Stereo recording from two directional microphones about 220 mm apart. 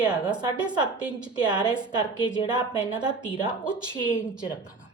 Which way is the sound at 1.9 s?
20° right (ahead or behind).